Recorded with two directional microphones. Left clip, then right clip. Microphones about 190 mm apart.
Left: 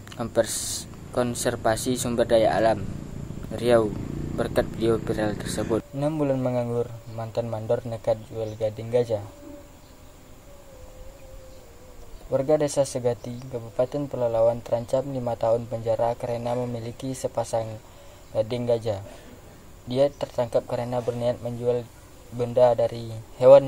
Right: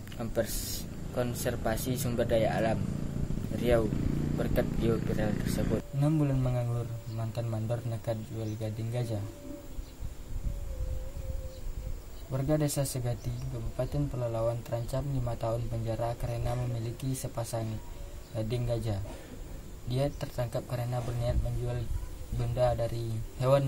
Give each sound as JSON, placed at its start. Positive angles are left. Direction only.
{"t": 0.1, "sound": "speech", "side_deg": 20}
{"t": 12.3, "sound": "speech", "side_deg": 5}